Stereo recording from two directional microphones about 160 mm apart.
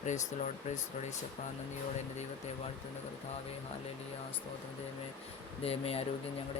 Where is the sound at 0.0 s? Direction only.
50° left (ahead or behind).